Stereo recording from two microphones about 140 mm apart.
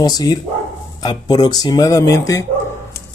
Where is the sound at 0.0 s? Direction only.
30° left (ahead or behind).